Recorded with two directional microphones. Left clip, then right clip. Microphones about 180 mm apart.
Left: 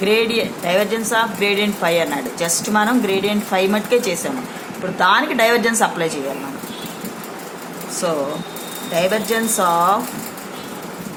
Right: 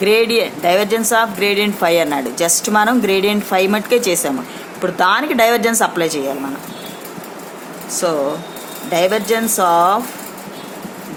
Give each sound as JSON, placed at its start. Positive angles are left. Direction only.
{"t": 0.0, "sound": "speech", "side_deg": -50}
{"t": 9.0, "sound": "speech", "side_deg": -45}